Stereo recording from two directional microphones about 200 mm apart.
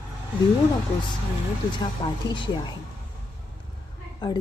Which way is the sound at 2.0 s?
30° left (ahead or behind).